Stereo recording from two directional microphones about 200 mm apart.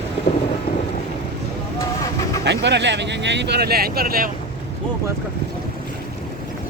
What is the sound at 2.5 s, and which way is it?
Speech, 60° right (ahead or behind).